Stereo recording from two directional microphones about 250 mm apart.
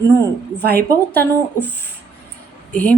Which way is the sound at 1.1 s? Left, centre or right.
Centre.